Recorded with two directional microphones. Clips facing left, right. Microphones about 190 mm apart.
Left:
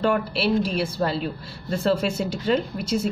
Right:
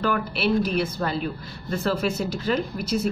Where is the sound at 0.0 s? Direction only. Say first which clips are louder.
Left 2 dB; 30° left (ahead or behind).